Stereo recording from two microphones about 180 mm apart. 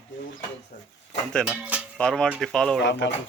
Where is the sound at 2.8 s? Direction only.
80° left.